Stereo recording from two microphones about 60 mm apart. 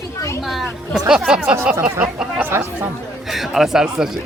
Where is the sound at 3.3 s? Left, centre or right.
Centre.